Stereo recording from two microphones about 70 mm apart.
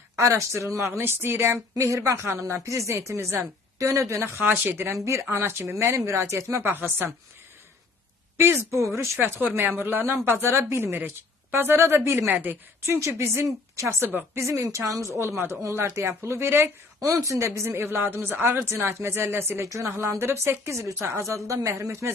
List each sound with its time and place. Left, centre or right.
0.2 s speech: right
1.7 s a woman's voice: right
4.4 s speech: right
4.9 s a woman's voice: right
5.3 s speech: right
6.6 s speech: right
8.4 s speech: right
12.8 s speech: right
14.4 s a woman's voice: right
17.1 s speech: right
19.6 s a woman's voice: right
20.0 s speech: right